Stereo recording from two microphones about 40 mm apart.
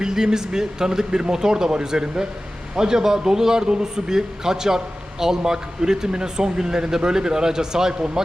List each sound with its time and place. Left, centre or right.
0.0 s speech: centre